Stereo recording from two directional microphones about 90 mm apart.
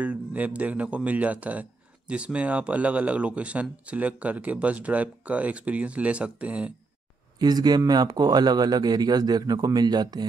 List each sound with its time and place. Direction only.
0.0 s speech: 15° right (ahead or behind)
7.3 s speech: 50° right (ahead or behind)